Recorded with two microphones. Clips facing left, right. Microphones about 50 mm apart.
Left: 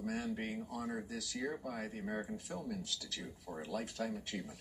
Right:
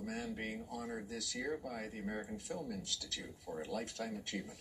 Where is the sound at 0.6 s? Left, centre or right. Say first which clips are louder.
Left 2 dB; centre.